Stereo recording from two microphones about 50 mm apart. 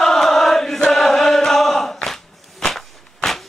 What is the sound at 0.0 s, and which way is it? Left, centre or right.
Chant, centre.